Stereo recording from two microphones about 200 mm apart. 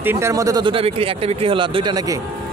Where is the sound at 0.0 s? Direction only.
10° right (ahead or behind).